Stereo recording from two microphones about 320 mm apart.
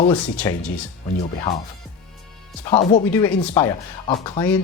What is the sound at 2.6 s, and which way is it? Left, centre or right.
Speech, centre.